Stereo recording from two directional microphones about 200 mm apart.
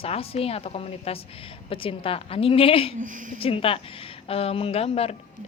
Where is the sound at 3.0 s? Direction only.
40° right (ahead or behind).